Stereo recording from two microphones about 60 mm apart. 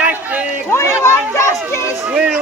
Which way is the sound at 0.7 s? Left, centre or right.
Left.